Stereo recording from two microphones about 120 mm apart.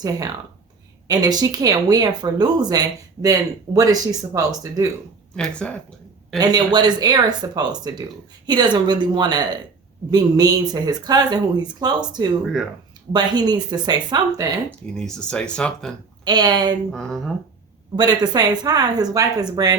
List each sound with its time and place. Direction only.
0.0 s speech: 30° right (ahead or behind)
5.4 s speech: 10° left (ahead or behind)
6.3 s speech: 35° right (ahead or behind)
14.9 s speech: 5° left (ahead or behind)
16.2 s speech: 35° right (ahead or behind)
16.9 s speech: 5° left (ahead or behind)
17.9 s speech: 35° right (ahead or behind)